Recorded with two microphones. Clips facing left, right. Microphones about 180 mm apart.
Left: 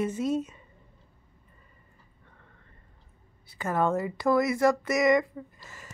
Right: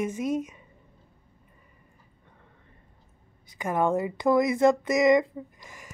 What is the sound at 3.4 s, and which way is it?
Speech, 15° right (ahead or behind).